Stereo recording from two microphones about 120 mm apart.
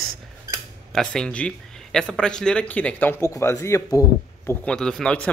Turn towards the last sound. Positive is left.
turn(degrees=5)  # may be behind; listen again after turning